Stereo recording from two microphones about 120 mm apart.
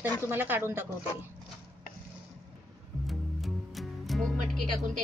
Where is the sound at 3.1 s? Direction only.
Centre (ahead or behind).